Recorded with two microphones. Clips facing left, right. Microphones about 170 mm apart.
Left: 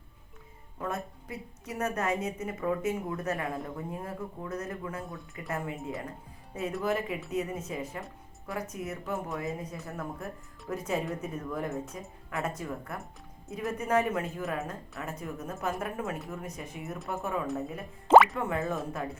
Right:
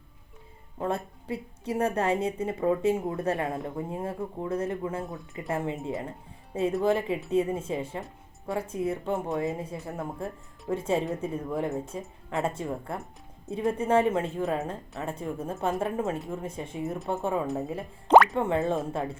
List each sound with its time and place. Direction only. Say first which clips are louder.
0.8 s a woman's voice: right 5 dB; 30° right (ahead or behind)